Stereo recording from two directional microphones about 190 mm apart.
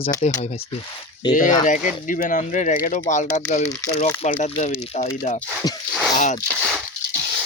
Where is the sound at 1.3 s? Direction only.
40° left (ahead or behind).